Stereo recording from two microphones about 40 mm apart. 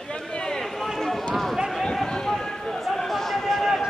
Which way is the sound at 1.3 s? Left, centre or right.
Centre.